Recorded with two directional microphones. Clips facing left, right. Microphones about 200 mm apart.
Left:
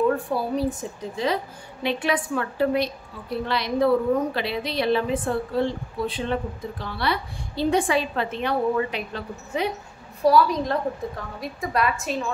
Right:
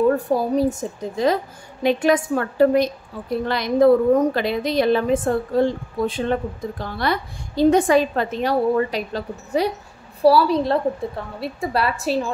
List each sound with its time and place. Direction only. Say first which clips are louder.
0.1 s a woman's voice: right 5 dB; 45° right (ahead or behind)